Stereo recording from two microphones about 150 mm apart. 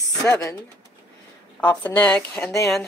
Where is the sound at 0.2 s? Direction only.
20° left (ahead or behind).